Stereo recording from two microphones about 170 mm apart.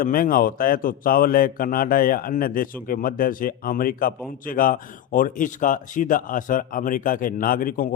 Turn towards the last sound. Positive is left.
turn(degrees=55)  # may be behind; listen again after turning